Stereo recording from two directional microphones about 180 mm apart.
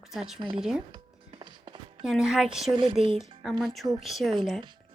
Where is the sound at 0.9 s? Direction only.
25° right (ahead or behind).